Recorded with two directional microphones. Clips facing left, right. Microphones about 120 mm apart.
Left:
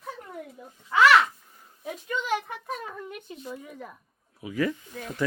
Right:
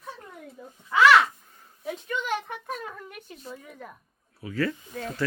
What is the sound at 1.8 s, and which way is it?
Speech, 10° left (ahead or behind).